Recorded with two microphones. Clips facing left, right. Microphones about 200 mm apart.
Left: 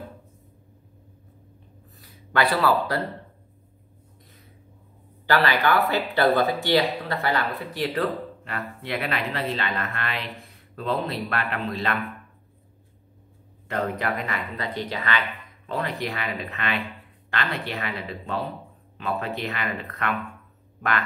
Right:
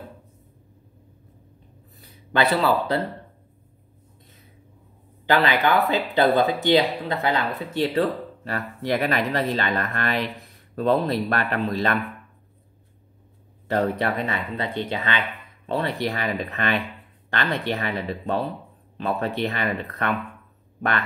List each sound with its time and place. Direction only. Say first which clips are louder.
2.3 s speech: right 1 dB; 25° right (ahead or behind)
5.2 s speech: right 2 dB; 20° right (ahead or behind); by 12.0 s 40° right (ahead or behind)
13.7 s speech: right 4 dB; 35° right (ahead or behind)